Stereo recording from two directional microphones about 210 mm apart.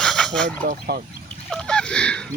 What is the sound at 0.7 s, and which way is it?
Speech, 40° right (ahead or behind).